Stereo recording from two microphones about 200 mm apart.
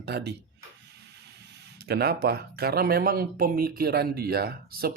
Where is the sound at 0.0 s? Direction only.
55° right (ahead or behind).